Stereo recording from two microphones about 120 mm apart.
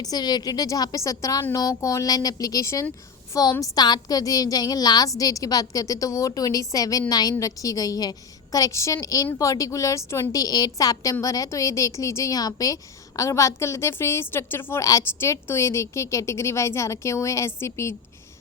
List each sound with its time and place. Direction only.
0.0 s a woman's voice: 35° left (ahead or behind)